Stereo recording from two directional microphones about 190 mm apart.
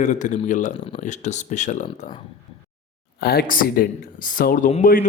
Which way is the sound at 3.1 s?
55° left (ahead or behind).